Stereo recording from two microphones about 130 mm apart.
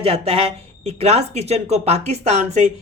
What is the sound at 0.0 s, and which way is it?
Speech, 50° right (ahead or behind).